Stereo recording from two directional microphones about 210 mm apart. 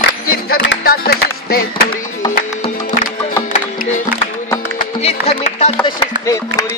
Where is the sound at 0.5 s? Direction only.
45° left (ahead or behind).